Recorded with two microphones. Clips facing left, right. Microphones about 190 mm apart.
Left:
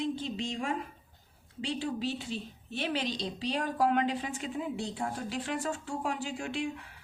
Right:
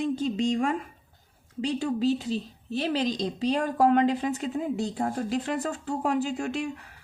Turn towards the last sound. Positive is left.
turn(degrees=-40)  # may be behind; listen again after turning